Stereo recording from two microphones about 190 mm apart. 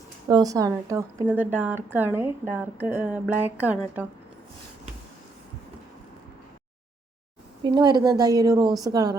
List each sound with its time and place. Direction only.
0.3 s speech: 20° right (ahead or behind)
7.6 s a woman's voice: 25° right (ahead or behind)